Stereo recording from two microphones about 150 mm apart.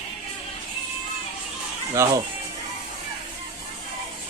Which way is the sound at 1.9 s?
20° right (ahead or behind).